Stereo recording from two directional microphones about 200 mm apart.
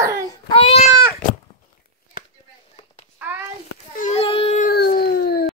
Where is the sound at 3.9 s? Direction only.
35° left (ahead or behind).